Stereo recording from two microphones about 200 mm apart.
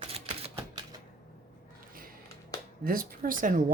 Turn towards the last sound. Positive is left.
turn(degrees=-40)  # may be behind; listen again after turning